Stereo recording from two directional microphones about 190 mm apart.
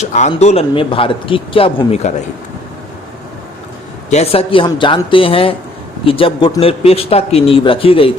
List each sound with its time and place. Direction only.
0.0 s speech: 35° left (ahead or behind)
4.1 s speech: 30° left (ahead or behind)